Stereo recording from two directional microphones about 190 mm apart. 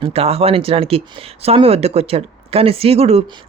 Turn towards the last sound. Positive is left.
turn(degrees=-30)  # may be behind; listen again after turning